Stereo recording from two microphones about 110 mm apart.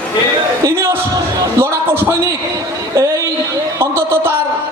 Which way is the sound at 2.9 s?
30° right (ahead or behind).